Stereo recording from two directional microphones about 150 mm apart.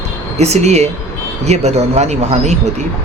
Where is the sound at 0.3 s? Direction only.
45° right (ahead or behind).